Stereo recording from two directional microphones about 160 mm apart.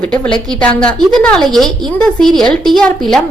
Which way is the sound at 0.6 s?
5° left (ahead or behind).